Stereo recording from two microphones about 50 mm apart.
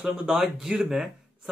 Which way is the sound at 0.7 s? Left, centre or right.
Right.